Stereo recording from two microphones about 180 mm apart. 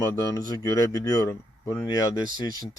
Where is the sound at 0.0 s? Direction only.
20° left (ahead or behind).